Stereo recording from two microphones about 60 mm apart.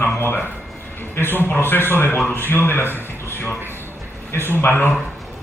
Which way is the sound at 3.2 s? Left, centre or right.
Left.